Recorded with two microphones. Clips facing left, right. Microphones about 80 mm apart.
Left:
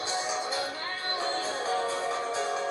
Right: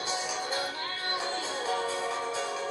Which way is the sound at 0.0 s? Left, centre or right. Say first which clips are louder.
Left 2 dB; left.